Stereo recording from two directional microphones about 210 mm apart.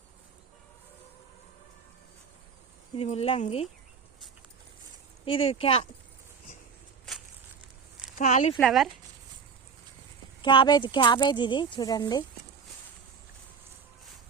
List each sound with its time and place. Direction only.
2.9 s speech: 30° left (ahead or behind)
5.2 s speech: 25° left (ahead or behind)
7.1 s walk: centre (ahead or behind)
8.2 s speech: 35° left (ahead or behind)
8.5 s speech: centre (ahead or behind)
10.4 s speech: 25° left (ahead or behind)